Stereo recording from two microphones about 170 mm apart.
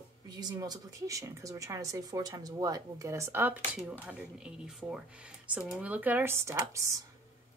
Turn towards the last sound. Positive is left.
turn(degrees=-15)  # may be behind; listen again after turning